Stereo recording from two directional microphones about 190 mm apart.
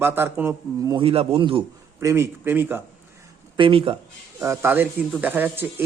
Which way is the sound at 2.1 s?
15° right (ahead or behind).